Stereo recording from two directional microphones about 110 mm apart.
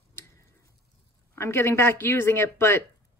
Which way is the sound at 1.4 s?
25° left (ahead or behind).